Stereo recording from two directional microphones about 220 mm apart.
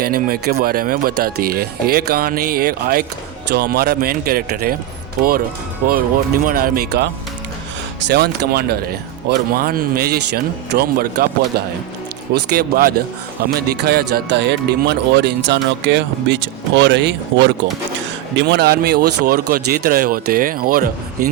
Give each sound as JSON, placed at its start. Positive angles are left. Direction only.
{"t": 0.0, "sound": "speech", "side_deg": -45}
{"t": 5.8, "sound": "speech", "side_deg": -40}